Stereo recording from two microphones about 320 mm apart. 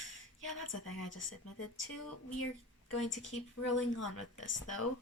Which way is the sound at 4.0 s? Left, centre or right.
Left.